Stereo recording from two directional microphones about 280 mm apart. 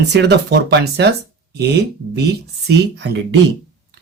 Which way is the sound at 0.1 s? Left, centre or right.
Right.